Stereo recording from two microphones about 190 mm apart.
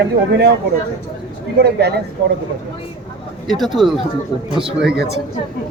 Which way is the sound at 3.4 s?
Centre (ahead or behind).